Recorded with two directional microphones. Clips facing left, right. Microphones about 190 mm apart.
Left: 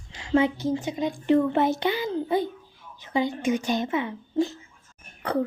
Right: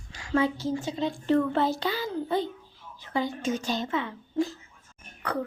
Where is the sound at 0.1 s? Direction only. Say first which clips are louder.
Left 3 dB; 20° left (ahead or behind).